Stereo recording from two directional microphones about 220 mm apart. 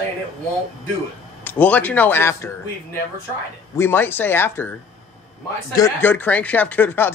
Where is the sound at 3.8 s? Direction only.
10° left (ahead or behind).